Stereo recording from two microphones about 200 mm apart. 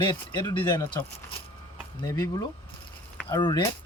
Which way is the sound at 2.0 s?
15° left (ahead or behind).